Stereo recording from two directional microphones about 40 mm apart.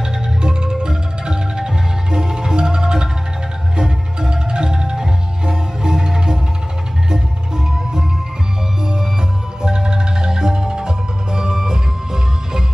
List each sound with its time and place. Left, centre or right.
0.0 s music: centre